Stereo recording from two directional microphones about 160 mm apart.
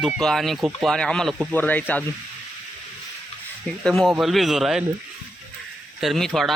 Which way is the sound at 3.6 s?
5° left (ahead or behind).